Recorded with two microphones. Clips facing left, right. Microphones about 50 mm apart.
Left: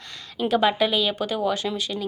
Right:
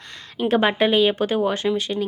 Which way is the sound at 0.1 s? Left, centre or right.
Right.